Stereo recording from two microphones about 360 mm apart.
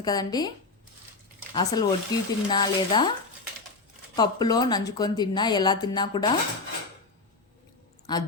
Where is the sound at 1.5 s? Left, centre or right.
Centre.